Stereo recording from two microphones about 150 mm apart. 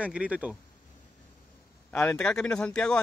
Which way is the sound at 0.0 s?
10° right (ahead or behind).